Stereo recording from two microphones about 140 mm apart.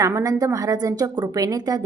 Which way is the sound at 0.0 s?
20° right (ahead or behind).